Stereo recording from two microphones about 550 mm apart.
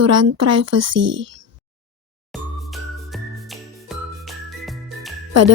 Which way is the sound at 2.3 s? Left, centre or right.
Centre.